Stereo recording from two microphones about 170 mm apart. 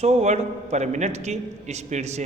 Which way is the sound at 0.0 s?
40° right (ahead or behind).